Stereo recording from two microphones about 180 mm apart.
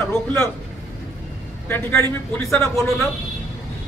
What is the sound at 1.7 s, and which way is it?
Speech, 10° left (ahead or behind).